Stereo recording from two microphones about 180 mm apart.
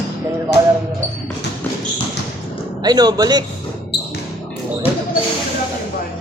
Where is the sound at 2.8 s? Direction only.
20° right (ahead or behind).